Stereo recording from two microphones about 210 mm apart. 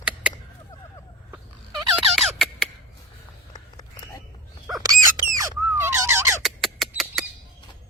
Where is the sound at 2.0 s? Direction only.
Centre (ahead or behind).